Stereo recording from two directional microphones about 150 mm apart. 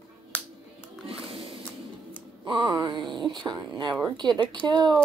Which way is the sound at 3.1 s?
30° right (ahead or behind).